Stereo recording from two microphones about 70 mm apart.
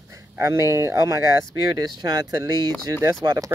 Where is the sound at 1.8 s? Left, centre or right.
Right.